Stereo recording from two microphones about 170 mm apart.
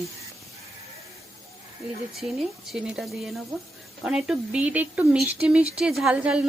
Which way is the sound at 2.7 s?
5° right (ahead or behind).